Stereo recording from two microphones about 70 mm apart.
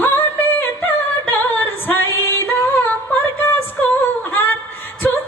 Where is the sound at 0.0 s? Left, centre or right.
Left.